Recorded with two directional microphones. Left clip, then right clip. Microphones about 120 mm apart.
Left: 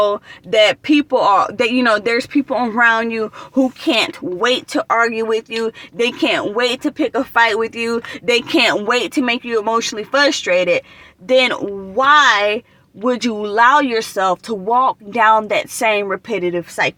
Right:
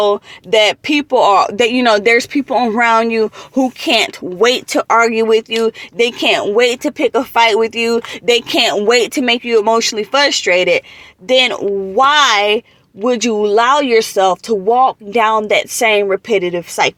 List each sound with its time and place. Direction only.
0.5 s speech: 30° right (ahead or behind)
13.0 s speech: 15° right (ahead or behind)